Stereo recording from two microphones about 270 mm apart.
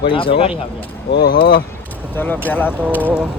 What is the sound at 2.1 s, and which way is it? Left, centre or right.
Speech, centre.